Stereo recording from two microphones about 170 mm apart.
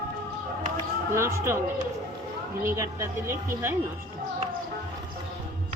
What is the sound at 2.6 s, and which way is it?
Speech, 15° right (ahead or behind).